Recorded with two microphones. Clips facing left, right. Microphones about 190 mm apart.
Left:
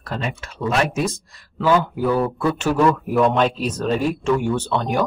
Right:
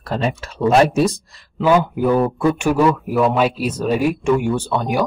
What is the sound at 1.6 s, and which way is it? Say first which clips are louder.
Speech: right 3 dB; 15° right (ahead or behind).